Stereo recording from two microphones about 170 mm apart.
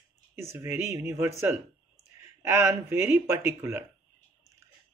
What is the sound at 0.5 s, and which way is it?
Speech, 15° right (ahead or behind).